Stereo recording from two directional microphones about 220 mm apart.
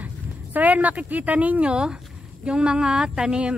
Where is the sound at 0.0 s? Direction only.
5° right (ahead or behind).